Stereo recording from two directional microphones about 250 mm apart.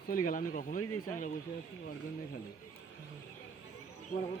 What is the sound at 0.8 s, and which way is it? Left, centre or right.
Speech, left.